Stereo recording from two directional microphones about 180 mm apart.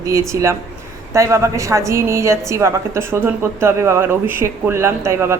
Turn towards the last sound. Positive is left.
turn(degrees=-15)  # may be behind; listen again after turning